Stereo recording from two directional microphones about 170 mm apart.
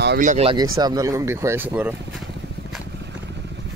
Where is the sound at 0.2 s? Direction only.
45° right (ahead or behind).